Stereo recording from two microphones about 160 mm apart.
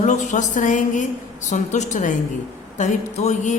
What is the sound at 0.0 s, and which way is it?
A woman's voice, 50° left (ahead or behind).